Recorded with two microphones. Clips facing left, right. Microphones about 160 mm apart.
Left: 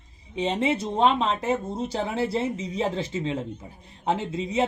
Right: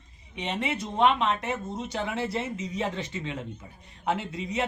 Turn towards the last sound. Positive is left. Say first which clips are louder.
# left 5 dB
turn(degrees=25)  # may be behind; listen again after turning